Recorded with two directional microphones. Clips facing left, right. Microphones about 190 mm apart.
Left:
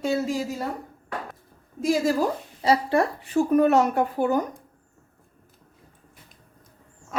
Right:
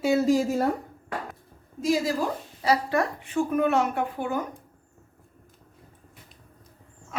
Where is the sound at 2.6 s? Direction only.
30° left (ahead or behind).